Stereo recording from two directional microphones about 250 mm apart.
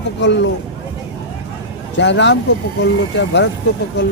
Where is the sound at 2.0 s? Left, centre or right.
Left.